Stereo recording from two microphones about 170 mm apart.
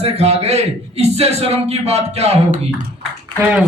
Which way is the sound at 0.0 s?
40° right (ahead or behind).